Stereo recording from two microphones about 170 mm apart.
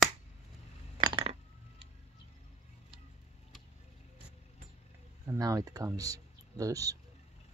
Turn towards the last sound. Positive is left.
turn(degrees=-20)  # may be behind; listen again after turning